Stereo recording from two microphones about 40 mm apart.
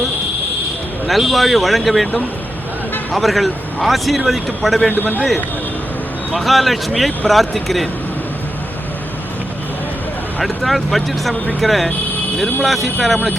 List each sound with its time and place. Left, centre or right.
1.0 s speech: centre
4.9 s a man's voice: left
6.3 s speech: centre
10.4 s speech: centre